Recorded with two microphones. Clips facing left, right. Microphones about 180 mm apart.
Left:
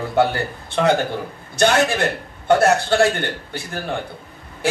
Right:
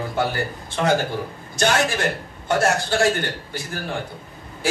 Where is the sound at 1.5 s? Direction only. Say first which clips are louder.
Left 4 dB; 60° left (ahead or behind).